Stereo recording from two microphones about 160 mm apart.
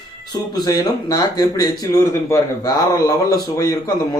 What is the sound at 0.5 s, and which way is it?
A man's voice, 25° left (ahead or behind).